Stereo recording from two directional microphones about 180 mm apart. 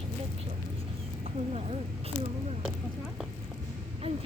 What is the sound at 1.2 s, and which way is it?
Speech, 35° right (ahead or behind).